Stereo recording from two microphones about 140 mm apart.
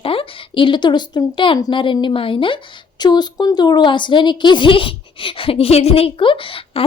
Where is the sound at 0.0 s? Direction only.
40° left (ahead or behind).